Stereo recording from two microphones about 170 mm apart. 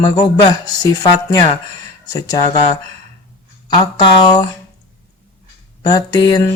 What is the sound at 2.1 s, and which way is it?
Speech, 25° left (ahead or behind).